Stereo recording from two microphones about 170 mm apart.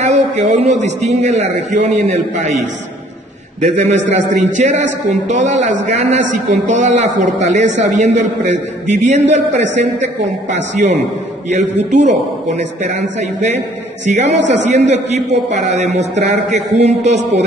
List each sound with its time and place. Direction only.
0.0 s a sound: 40° right (ahead or behind)
0.7 s a man's voice: 40° right (ahead or behind)
3.6 s a man's voice: 45° right (ahead or behind)
14.0 s a man's voice: 40° right (ahead or behind)